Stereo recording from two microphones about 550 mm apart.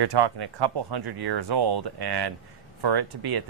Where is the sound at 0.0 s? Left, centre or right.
Right.